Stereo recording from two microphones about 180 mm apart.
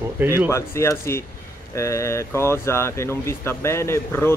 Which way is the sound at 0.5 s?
15° left (ahead or behind).